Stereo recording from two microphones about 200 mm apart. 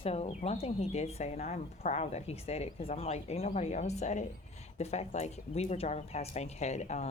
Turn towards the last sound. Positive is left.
turn(degrees=35)  # may be behind; listen again after turning